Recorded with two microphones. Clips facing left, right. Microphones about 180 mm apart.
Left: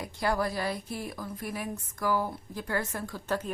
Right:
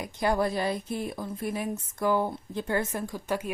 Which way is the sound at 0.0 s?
20° right (ahead or behind).